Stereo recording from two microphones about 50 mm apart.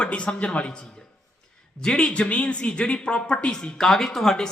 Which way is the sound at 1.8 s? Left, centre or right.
Centre.